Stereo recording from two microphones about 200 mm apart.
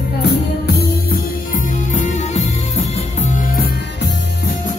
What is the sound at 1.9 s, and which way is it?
Music, 40° left (ahead or behind).